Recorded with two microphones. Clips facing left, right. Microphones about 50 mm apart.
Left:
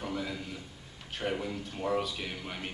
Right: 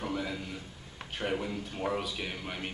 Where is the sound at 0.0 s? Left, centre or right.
Centre.